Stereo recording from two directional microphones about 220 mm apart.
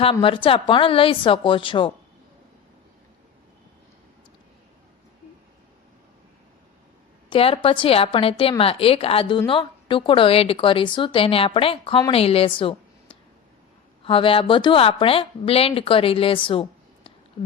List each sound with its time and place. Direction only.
0.0 s speech: 25° left (ahead or behind)
7.3 s speech: 25° left (ahead or behind)